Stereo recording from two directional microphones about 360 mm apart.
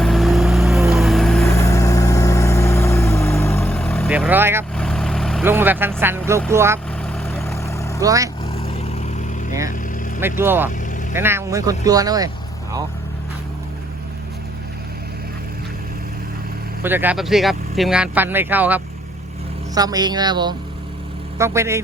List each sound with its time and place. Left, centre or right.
0.0 s vehicle: centre
7.0 s vehicle: centre
8.0 s speech: centre
8.6 s vehicle: centre
10.2 s speech: centre
16.8 s speech: centre